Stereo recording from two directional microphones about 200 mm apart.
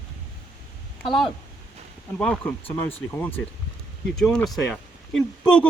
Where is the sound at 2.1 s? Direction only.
5° left (ahead or behind).